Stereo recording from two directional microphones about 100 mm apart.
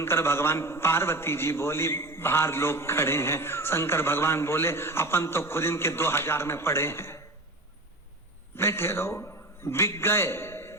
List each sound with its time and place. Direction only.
0.0 s a man's voice: 25° left (ahead or behind)
8.5 s a man's voice: 25° left (ahead or behind)